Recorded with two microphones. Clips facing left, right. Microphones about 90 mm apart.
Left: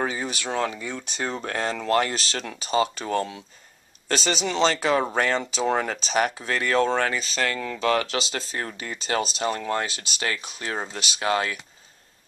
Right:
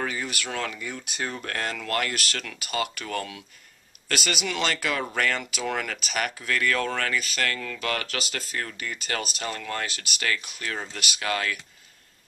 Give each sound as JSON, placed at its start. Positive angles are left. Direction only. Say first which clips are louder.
{"t": 0.0, "sound": "speech", "louder": "left 3 dB", "side_deg": 25}